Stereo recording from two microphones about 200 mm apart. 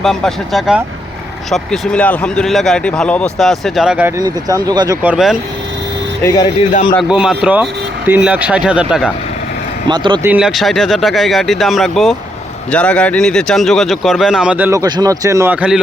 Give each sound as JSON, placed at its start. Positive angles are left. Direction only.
{"t": 0.0, "sound": "speech", "side_deg": 0}
{"t": 4.2, "sound": "speech", "side_deg": -20}
{"t": 5.0, "sound": "speech", "side_deg": -5}
{"t": 6.2, "sound": "speech", "side_deg": 20}
{"t": 7.1, "sound": "speech", "side_deg": -5}
{"t": 9.8, "sound": "speech", "side_deg": -25}
{"t": 10.2, "sound": "speech", "side_deg": -5}